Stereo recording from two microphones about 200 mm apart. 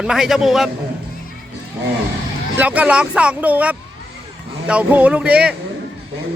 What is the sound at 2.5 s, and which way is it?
Speech, 5° right (ahead or behind).